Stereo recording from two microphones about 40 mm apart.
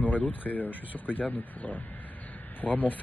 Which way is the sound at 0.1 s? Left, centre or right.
Left.